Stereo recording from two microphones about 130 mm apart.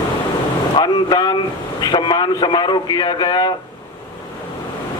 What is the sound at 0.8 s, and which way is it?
Vehicle, 35° left (ahead or behind).